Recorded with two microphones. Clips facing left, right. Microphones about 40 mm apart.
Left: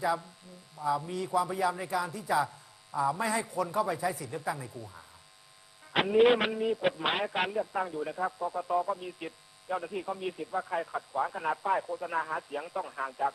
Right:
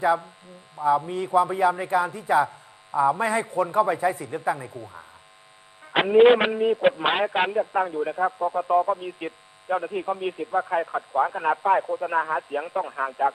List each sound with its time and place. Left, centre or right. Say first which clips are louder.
0.0 s a man's voice: right 8 dB; right